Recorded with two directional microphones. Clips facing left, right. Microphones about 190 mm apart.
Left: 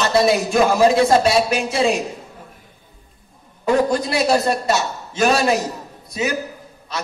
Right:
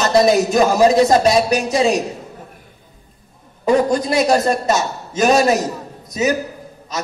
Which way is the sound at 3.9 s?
45° right (ahead or behind).